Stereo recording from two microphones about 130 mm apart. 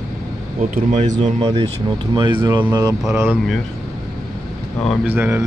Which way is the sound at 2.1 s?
35° right (ahead or behind).